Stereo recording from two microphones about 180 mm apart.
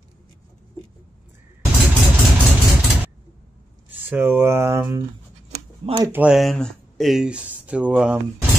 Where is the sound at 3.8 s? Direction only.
10° right (ahead or behind).